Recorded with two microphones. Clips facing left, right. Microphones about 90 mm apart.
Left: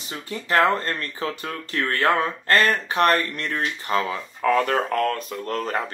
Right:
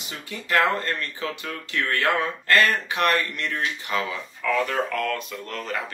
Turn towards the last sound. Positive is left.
turn(degrees=40)  # may be behind; listen again after turning